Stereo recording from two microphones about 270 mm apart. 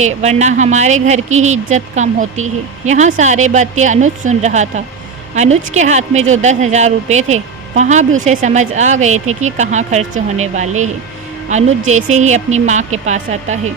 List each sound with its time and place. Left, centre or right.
0.0 s a woman's voice: right